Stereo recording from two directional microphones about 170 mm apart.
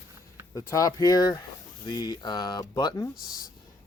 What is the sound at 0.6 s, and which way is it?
Speech, 20° left (ahead or behind).